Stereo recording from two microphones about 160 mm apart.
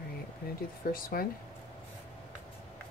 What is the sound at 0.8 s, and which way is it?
Speech, 65° left (ahead or behind).